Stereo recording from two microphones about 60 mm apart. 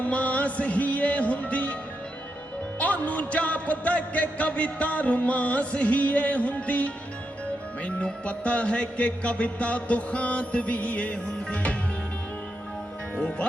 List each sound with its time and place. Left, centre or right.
0.0 s music: left
2.7 s music: left